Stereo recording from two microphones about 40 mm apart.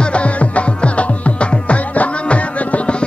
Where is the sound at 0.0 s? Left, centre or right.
Left.